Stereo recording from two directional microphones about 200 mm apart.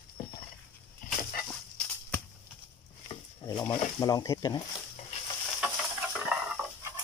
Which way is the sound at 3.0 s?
20° left (ahead or behind).